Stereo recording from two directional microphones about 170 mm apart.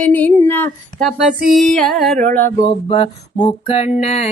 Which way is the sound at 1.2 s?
5° right (ahead or behind).